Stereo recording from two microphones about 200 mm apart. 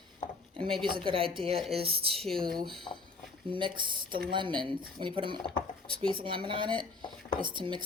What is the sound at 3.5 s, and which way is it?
Speech, 25° right (ahead or behind).